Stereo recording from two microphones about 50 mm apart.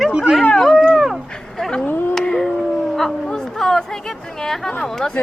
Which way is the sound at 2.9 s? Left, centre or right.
Centre.